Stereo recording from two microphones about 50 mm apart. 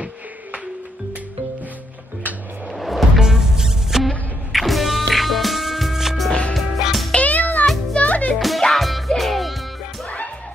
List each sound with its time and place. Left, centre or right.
2.7 s music: centre
7.1 s music: left
8.4 s music: centre
10.0 s music: left